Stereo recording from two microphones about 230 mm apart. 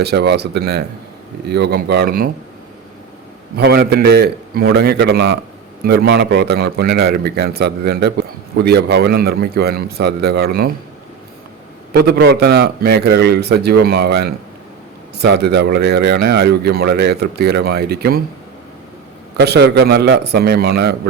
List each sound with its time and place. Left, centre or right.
0.0 s a man's voice: right
3.5 s a man's voice: right
11.9 s a man's voice: right
19.4 s a man's voice: right